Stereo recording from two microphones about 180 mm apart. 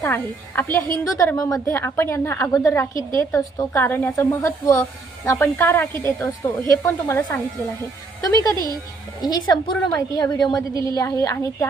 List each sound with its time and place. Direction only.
0.0 s a woman's voice: 10° left (ahead or behind)
8.5 s speech: 20° right (ahead or behind)
9.2 s a woman's voice: 25° left (ahead or behind)